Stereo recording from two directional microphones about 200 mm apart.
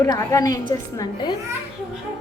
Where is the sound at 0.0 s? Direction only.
15° left (ahead or behind).